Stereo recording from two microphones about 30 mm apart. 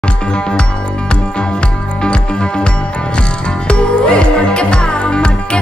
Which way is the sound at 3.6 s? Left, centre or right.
Left.